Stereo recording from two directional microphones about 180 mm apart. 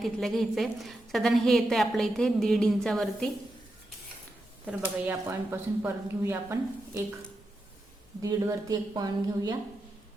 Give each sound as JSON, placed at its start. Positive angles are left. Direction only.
{"t": 0.0, "sound": "a woman's voice", "side_deg": 0}
{"t": 4.6, "sound": "speech", "side_deg": -10}
{"t": 8.2, "sound": "a woman's voice", "side_deg": -20}